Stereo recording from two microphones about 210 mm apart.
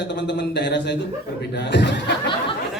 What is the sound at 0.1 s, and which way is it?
A man's voice, 55° left (ahead or behind).